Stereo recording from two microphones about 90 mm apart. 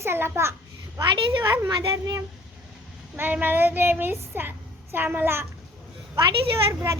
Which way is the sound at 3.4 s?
20° right (ahead or behind).